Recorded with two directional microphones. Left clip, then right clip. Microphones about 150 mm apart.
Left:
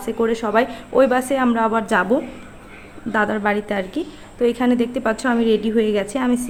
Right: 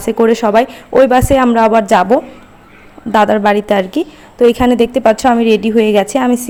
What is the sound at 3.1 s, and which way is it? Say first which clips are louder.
A woman's voice: right 10 dB; 45° right (ahead or behind).